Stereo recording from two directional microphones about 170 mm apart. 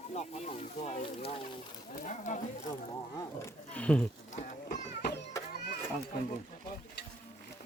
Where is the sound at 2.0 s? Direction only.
45° left (ahead or behind).